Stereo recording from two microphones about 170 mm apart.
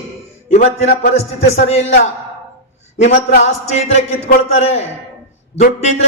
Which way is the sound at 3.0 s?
45° left (ahead or behind).